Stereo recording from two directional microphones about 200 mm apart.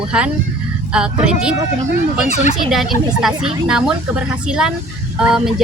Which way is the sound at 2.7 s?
Centre (ahead or behind).